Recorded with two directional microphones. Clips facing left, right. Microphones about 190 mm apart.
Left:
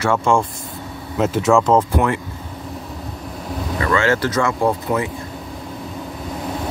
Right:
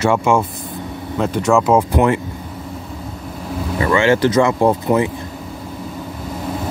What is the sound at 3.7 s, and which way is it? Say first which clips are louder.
Speech: right 4 dB; 20° right (ahead or behind).